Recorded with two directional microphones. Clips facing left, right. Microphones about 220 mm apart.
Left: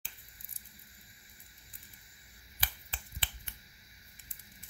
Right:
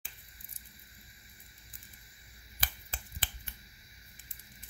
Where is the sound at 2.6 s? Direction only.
45° right (ahead or behind).